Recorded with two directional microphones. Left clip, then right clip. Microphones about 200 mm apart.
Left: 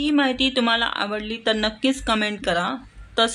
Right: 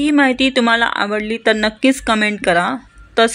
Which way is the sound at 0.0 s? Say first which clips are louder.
Right 6 dB; 30° right (ahead or behind).